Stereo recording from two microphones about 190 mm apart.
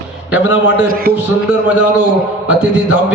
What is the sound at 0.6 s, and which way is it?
Speech, 50° right (ahead or behind).